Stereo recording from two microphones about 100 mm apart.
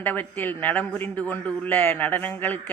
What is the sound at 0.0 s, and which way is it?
A man's voice, 20° left (ahead or behind).